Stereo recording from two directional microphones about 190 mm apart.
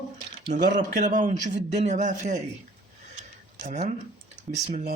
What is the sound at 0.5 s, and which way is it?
A man's voice, 40° right (ahead or behind).